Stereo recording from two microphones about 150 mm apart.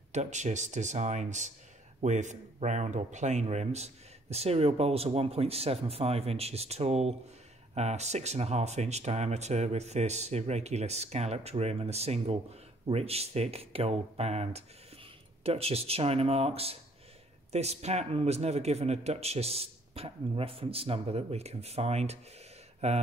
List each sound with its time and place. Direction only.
0.1 s speech: 50° right (ahead or behind)